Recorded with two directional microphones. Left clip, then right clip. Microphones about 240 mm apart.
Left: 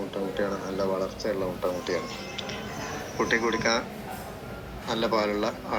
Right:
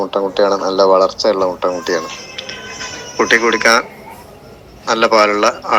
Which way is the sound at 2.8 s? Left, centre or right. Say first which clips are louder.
Right 13 dB; right.